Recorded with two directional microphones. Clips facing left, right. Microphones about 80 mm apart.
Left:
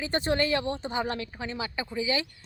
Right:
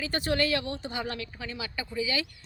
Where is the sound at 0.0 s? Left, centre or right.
Left.